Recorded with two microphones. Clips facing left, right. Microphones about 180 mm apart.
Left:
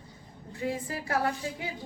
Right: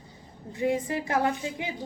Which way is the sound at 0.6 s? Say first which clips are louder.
Right 6 dB; 20° right (ahead or behind).